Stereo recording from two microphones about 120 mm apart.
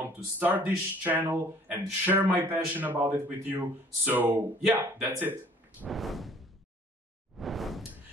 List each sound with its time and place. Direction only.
0.4 s speech: 15° right (ahead or behind)
5.9 s a sound: centre (ahead or behind)
7.3 s whoosh: centre (ahead or behind)